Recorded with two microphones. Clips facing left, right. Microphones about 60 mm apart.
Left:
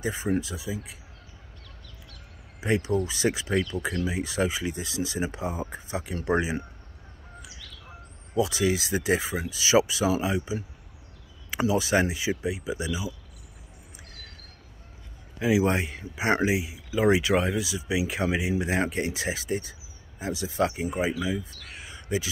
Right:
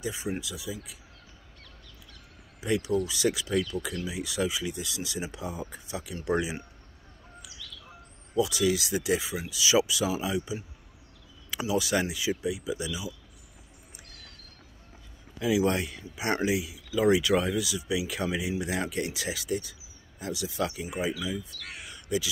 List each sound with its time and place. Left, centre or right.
0.0 s speech: left
2.6 s speech: left
7.6 s bird: left
8.4 s speech: left
11.6 s speech: left
15.3 s speech: left